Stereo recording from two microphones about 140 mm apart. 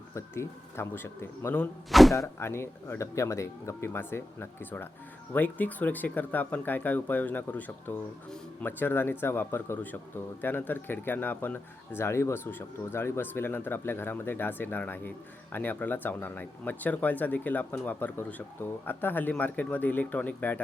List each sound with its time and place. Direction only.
0.1 s speech: 20° left (ahead or behind)
1.9 s speech: centre (ahead or behind)
2.1 s speech: 20° left (ahead or behind)